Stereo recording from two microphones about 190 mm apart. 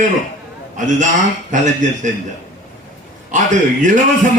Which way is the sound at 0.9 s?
40° right (ahead or behind).